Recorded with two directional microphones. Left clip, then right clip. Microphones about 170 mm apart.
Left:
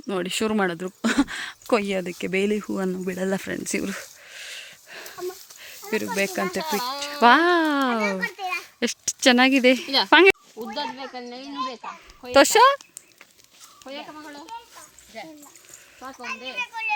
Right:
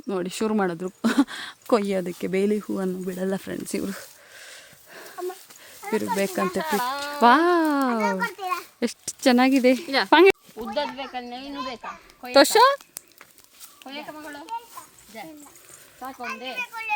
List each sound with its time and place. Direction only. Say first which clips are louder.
0.1 s speech: left 1 dB; 5° left (ahead or behind)
3.1 s a sound: left 2 dB; 10° left (ahead or behind)
6.1 s speech: even; 5° right (ahead or behind)
6.6 s speech: right 1 dB; 15° left (ahead or behind)
7.1 s speech: left 1 dB; centre (ahead or behind)
8.4 s a sound: even; 75° right (ahead or behind)
8.8 s speech: left 4 dB; centre (ahead or behind)
10.1 s speech: left 1 dB; centre (ahead or behind)
10.8 s speech: right 3 dB; 15° right (ahead or behind)
12.3 s speech: left 1 dB; centre (ahead or behind)
15.1 s speech: left 1 dB; 70° right (ahead or behind)
16.2 s a child's voice: left 1 dB; 80° right